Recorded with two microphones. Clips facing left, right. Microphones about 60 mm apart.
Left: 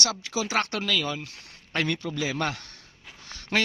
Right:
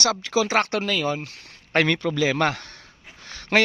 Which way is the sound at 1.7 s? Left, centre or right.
Right.